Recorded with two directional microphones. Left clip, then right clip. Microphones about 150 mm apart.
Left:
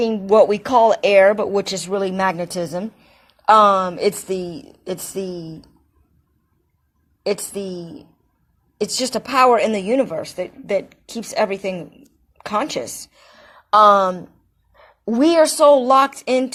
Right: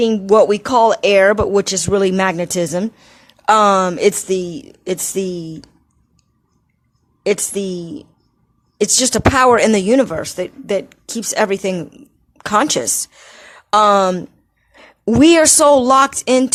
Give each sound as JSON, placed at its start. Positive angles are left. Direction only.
{"t": 0.0, "sound": "speech", "side_deg": -40}
{"t": 1.9, "sound": "a woman's voice", "side_deg": -50}
{"t": 2.1, "sound": "a woman's voice", "side_deg": -35}
{"t": 7.3, "sound": "a woman's voice", "side_deg": -40}